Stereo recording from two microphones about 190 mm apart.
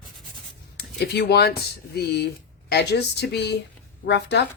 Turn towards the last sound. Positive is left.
turn(degrees=60)  # may be behind; listen again after turning